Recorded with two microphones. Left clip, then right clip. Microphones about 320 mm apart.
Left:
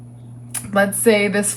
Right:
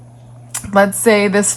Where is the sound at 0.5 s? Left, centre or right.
Right.